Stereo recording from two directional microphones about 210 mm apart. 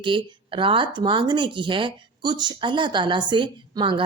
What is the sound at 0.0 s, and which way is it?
Speech, 25° right (ahead or behind).